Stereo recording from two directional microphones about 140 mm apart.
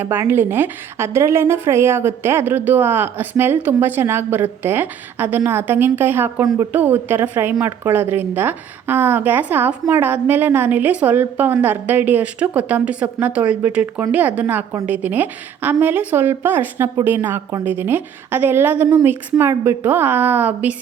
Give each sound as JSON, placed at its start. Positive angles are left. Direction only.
{"t": 0.0, "sound": "a woman's voice", "side_deg": -15}